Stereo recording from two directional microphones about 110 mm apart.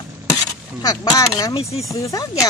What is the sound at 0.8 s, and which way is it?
Speech, 30° left (ahead or behind).